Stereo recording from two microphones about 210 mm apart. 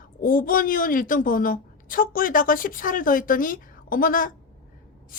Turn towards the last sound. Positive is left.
turn(degrees=40)  # may be behind; listen again after turning